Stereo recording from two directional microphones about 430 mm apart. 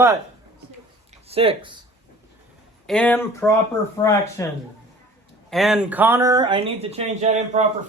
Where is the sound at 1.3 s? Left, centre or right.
Centre.